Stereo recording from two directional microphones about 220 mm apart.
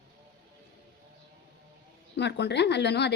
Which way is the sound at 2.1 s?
50° left (ahead or behind).